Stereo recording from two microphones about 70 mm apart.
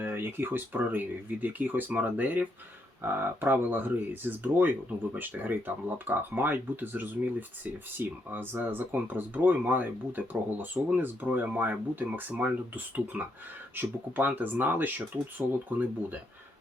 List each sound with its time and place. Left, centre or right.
0.0 s speech: right